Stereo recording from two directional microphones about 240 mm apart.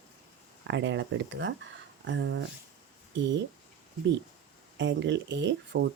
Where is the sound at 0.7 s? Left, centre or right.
Right.